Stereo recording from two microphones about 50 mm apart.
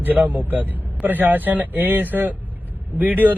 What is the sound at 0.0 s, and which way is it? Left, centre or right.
A man's voice, right.